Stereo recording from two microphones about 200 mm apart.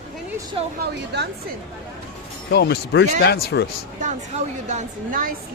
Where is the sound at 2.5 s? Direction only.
55° left (ahead or behind).